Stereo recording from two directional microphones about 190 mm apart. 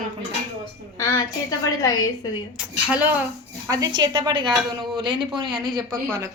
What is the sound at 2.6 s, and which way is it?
Speech, 5° right (ahead or behind).